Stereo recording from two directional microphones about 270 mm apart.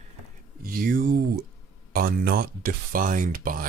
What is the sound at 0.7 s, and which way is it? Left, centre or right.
Speech, right.